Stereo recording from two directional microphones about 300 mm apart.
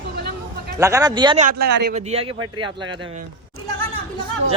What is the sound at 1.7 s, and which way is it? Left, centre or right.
Speech, right.